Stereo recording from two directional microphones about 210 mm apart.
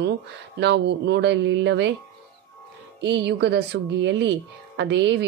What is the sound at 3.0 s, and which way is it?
A woman's voice, 55° right (ahead or behind).